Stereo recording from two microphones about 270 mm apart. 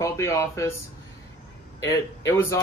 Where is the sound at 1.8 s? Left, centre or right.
Centre.